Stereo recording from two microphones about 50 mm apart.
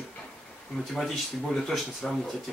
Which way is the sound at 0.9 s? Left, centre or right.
Centre.